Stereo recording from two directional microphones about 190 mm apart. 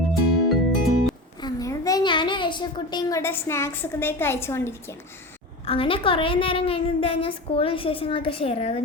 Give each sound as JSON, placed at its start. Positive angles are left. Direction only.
{"t": 0.1, "sound": "music", "side_deg": 0}
{"t": 1.4, "sound": "a child's voice", "side_deg": 20}
{"t": 5.6, "sound": "a woman's voice", "side_deg": 30}